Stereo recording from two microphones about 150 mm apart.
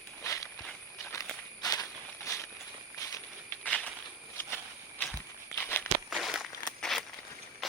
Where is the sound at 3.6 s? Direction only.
5° left (ahead or behind).